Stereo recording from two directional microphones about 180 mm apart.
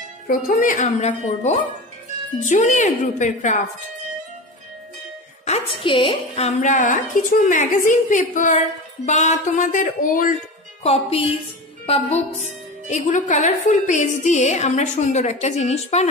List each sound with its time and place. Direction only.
0.3 s a woman's voice: 50° left (ahead or behind)
5.4 s a woman's voice: 35° left (ahead or behind)
10.8 s a woman's voice: 35° left (ahead or behind)